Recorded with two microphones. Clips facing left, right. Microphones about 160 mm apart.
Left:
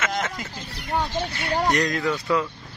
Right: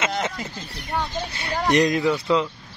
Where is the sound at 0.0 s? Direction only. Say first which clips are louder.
Right 2 dB; 30° right (ahead or behind).